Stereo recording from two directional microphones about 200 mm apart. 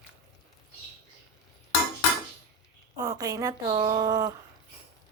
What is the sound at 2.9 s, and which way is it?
Speech, 20° right (ahead or behind).